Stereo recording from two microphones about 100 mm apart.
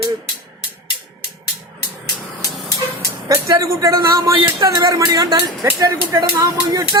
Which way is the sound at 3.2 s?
35° right (ahead or behind).